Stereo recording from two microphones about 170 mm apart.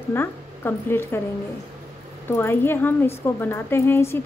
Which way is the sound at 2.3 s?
15° left (ahead or behind).